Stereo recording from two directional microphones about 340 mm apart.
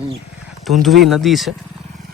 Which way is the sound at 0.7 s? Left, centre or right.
Centre.